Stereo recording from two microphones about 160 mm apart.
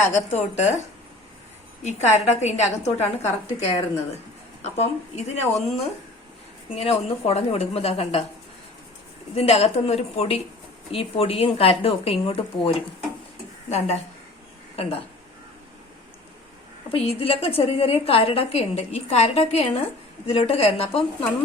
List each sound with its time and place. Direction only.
0.0 s a woman's voice: 45° left (ahead or behind)
1.8 s a woman's voice: 45° left (ahead or behind)
9.3 s a woman's voice: 40° left (ahead or behind)
16.9 s a woman's voice: 35° left (ahead or behind)